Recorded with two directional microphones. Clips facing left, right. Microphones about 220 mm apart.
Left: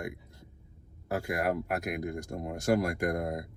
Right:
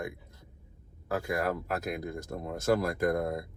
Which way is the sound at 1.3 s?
15° left (ahead or behind).